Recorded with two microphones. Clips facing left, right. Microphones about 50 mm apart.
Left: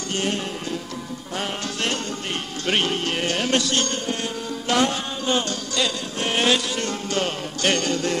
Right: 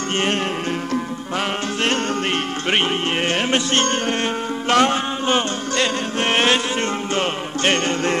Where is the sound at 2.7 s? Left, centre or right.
Right.